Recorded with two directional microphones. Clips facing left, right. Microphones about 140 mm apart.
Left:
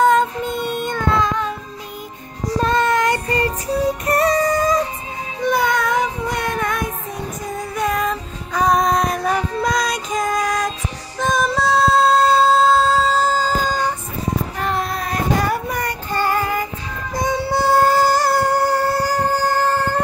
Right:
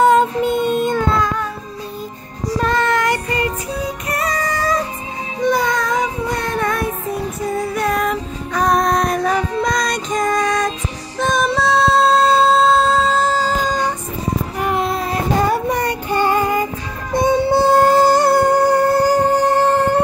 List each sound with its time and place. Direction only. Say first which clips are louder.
0.0 s music: right 2 dB; 5° right (ahead or behind)
0.7 s a sound: right 6 dB; 5° right (ahead or behind)
1.2 s a sound: even; 20° left (ahead or behind)
2.7 s child singing: even; 20° left (ahead or behind)
4.1 s music: left 5 dB; 30° left (ahead or behind)
5.4 s child singing: right 1 dB; 5° left (ahead or behind)
7.7 s music: left 2 dB; 5° right (ahead or behind)
14.6 s child singing: right 5 dB; 15° right (ahead or behind)
14.9 s child singing: right 2 dB; 25° right (ahead or behind)
16.1 s music: right 3 dB; 20° right (ahead or behind)